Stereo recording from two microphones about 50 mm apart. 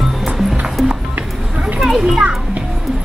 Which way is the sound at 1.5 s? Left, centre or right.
Right.